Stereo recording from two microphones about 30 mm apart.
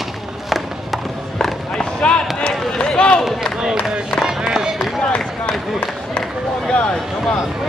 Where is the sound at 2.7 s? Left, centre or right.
Left.